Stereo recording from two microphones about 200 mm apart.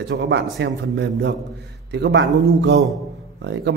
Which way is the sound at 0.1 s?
60° right (ahead or behind).